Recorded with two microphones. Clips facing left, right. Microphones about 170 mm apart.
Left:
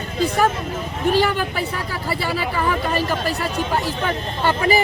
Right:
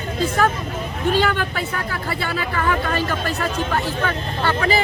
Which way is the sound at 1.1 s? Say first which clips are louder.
Left 1 dB; 10° left (ahead or behind).